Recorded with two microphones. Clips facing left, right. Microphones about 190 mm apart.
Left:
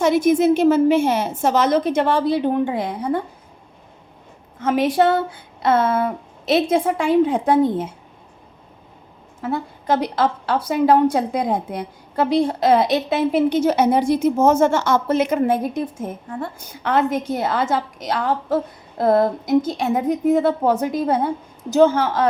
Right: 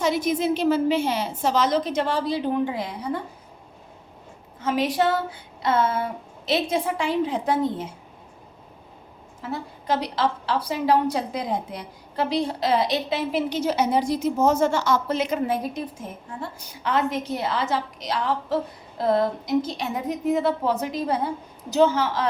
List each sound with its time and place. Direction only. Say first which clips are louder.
0.0 s a woman's voice: left 7 dB; 55° left (ahead or behind)
4.6 s speech: left 5 dB; 55° left (ahead or behind)
9.4 s a woman's voice: left 7 dB; 55° left (ahead or behind)